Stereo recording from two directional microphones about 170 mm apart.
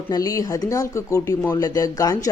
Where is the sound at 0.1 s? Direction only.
20° left (ahead or behind).